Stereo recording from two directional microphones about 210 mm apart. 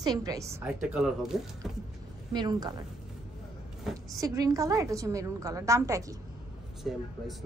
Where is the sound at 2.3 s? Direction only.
20° right (ahead or behind).